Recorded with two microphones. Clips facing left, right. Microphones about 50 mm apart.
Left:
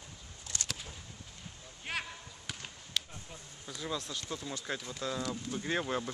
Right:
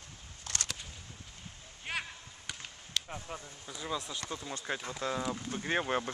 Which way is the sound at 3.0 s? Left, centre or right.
Right.